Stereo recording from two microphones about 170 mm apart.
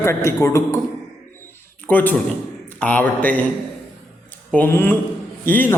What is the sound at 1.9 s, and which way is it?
A man's voice, 10° left (ahead or behind).